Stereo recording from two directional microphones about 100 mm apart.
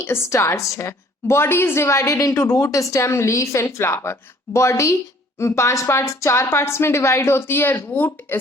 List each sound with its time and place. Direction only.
0.0 s a woman's voice: 25° left (ahead or behind)